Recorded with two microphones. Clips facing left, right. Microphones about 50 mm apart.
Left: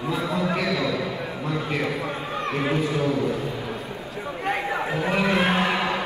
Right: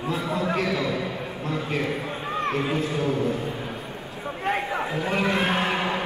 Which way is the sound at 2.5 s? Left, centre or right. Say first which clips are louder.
Left 5 dB; left.